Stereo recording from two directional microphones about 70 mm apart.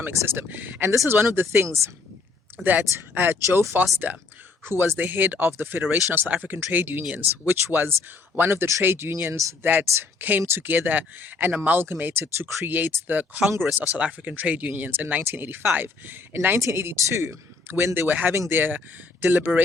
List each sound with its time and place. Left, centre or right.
0.0 s a woman's voice: right
2.6 s speech: right
3.4 s speech: right
4.0 s speech: right
4.6 s speech: right
6.2 s a woman's voice: right
18.1 s speech: right